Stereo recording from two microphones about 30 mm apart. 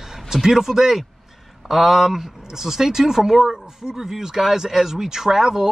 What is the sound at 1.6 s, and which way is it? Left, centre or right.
Speech, centre.